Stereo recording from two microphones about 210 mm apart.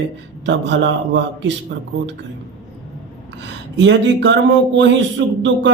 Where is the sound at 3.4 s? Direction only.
60° right (ahead or behind).